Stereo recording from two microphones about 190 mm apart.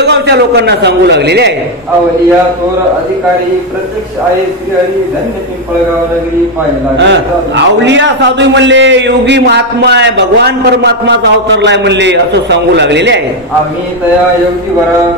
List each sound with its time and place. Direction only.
0.0 s a man's voice: 65° right (ahead or behind)
7.0 s a man's voice: 70° right (ahead or behind)